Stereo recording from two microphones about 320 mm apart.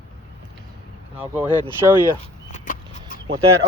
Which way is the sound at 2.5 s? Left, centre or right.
Left.